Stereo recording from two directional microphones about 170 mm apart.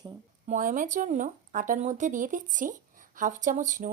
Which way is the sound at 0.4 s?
50° right (ahead or behind).